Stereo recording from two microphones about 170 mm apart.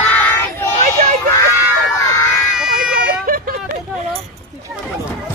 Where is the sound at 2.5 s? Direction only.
5° right (ahead or behind).